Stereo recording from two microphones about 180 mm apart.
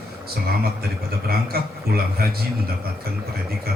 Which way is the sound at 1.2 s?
60° right (ahead or behind).